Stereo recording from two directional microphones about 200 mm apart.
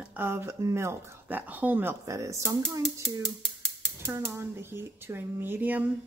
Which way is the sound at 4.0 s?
10° right (ahead or behind).